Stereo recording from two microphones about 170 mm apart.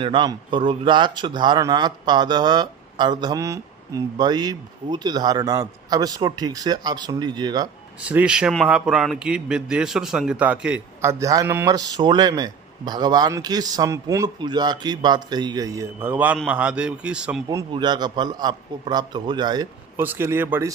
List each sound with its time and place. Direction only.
0.0 s speech: 30° right (ahead or behind)
8.0 s a man's voice: 5° right (ahead or behind)
11.0 s speech: 15° right (ahead or behind)
17.5 s speech: 20° right (ahead or behind)
20.0 s speech: 15° right (ahead or behind)